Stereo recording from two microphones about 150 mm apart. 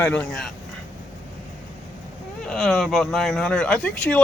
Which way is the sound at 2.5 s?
5° left (ahead or behind).